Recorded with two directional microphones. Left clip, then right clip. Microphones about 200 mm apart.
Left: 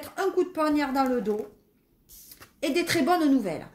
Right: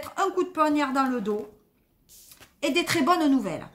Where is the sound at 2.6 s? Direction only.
35° right (ahead or behind).